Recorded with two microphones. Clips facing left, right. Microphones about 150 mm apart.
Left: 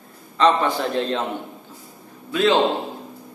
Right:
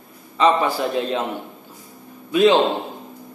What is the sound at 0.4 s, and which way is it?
Speech, 5° right (ahead or behind).